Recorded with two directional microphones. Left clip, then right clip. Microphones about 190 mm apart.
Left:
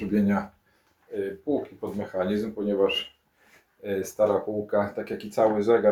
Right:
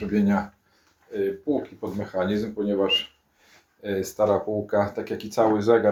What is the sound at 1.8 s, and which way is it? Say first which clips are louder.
Speech: right 2 dB; 5° right (ahead or behind).